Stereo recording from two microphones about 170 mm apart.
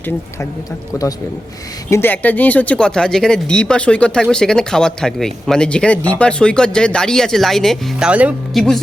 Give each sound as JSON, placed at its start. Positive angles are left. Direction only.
{"t": 1.9, "sound": "speech", "side_deg": 10}